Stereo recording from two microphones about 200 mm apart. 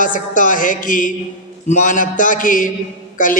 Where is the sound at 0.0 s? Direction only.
40° left (ahead or behind).